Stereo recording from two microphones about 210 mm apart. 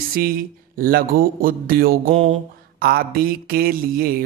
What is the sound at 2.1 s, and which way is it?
Mantra, 30° right (ahead or behind).